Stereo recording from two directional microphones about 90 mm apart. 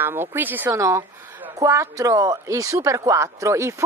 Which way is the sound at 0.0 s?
25° right (ahead or behind).